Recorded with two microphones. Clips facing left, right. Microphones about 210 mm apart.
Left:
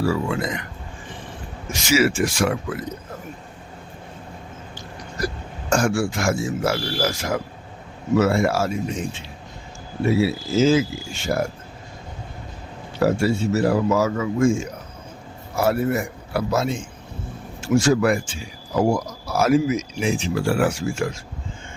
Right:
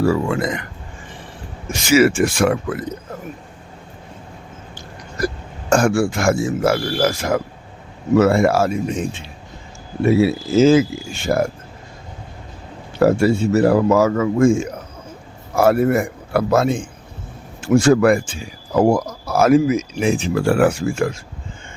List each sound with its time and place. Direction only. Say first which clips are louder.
0.0 s speech: right 5 dB; 50° right (ahead or behind)
1.9 s speech: right 5 dB; 55° right (ahead or behind)
5.7 s speech: right 5 dB; 55° right (ahead or behind)
10.2 s speech: right 5 dB; 55° right (ahead or behind)
13.0 s speech: right 5 dB; 55° right (ahead or behind)